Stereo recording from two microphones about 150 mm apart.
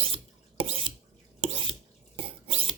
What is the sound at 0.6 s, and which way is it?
Drip, 35° right (ahead or behind).